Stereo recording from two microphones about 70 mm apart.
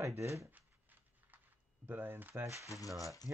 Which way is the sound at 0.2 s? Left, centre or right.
Right.